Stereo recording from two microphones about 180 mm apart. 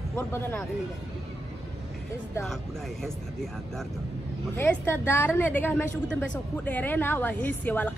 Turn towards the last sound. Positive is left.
turn(degrees=10)  # may be behind; listen again after turning